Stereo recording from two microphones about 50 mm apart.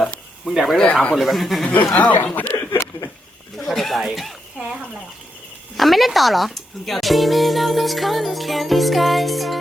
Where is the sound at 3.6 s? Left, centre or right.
Centre.